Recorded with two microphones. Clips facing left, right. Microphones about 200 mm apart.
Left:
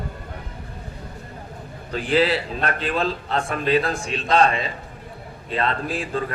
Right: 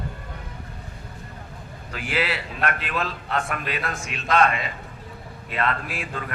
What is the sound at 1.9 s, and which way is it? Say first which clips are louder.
A man's voice: left 7 dB; 35° left (ahead or behind).